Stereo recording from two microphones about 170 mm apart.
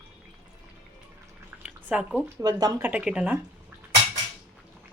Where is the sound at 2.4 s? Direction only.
20° right (ahead or behind).